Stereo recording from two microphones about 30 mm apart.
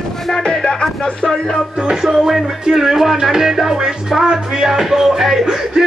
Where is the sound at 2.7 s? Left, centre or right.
Centre.